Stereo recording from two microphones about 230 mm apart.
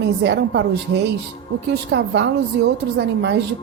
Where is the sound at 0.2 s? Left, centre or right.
Right.